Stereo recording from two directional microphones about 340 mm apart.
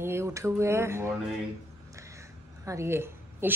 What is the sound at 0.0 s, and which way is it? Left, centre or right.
Speech, centre.